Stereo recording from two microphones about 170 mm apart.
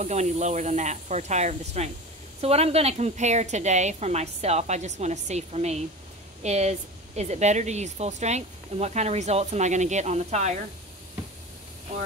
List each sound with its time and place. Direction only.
0.0 s speech: 40° right (ahead or behind)